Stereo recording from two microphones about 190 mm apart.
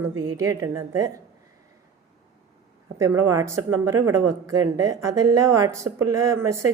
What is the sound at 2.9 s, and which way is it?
A woman's voice, 15° right (ahead or behind).